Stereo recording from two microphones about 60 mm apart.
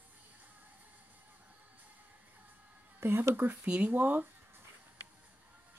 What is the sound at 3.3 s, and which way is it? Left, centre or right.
Speech, right.